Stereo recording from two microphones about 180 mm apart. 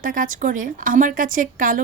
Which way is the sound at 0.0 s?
50° right (ahead or behind).